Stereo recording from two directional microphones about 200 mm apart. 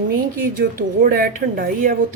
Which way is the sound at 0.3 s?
45° right (ahead or behind).